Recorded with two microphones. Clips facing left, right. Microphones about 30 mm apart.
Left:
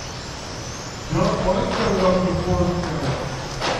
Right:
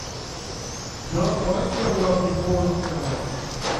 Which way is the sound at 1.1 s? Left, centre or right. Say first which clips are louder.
Left 3 dB; left.